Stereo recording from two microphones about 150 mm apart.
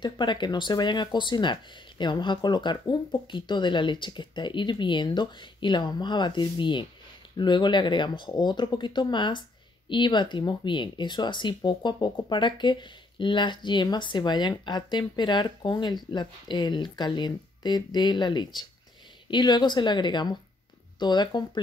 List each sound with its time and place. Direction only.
0.0 s speech: 30° left (ahead or behind)